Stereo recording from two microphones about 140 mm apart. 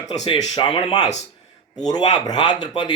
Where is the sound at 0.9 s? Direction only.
55° left (ahead or behind).